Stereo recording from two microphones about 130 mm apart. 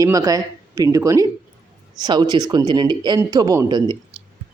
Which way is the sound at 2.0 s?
35° right (ahead or behind).